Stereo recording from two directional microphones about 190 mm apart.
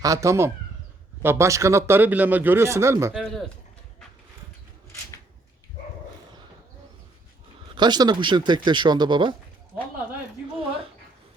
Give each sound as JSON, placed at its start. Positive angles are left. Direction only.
{"t": 0.0, "sound": "speech", "side_deg": -15}
{"t": 3.1, "sound": "speech", "side_deg": 0}
{"t": 7.8, "sound": "speech", "side_deg": -20}